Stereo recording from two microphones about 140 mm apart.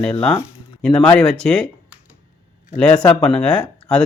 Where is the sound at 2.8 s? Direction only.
10° left (ahead or behind).